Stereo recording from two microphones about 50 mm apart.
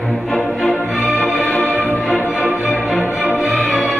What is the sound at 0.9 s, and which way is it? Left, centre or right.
Music, centre.